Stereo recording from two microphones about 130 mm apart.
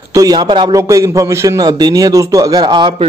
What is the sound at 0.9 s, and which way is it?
A man's voice, 25° right (ahead or behind).